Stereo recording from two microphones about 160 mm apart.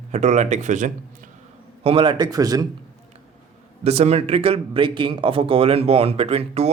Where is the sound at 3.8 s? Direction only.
40° right (ahead or behind).